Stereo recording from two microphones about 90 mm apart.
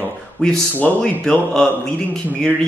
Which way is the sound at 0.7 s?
20° left (ahead or behind).